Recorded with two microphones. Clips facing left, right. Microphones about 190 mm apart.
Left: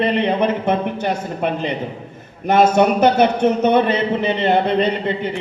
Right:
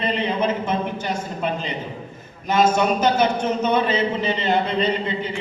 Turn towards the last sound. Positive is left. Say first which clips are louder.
# left 3 dB
turn(degrees=60)  # may be behind; listen again after turning